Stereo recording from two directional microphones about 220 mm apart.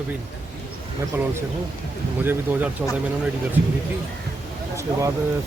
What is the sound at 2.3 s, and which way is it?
Speech, 10° right (ahead or behind).